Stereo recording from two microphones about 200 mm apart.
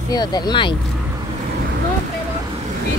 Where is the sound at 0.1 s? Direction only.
20° left (ahead or behind).